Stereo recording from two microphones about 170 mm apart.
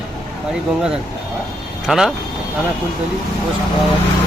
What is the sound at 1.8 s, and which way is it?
Speech, centre (ahead or behind).